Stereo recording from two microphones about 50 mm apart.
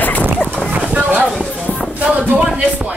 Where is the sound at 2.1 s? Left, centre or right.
Right.